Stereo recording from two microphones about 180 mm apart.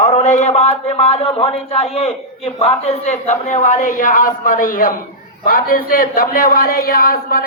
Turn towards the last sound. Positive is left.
turn(degrees=55)  # may be behind; listen again after turning